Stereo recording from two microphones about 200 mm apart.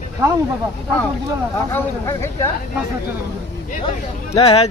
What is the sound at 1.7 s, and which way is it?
Speech, 15° left (ahead or behind).